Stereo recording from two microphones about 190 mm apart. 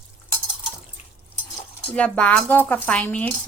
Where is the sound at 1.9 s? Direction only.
5° left (ahead or behind).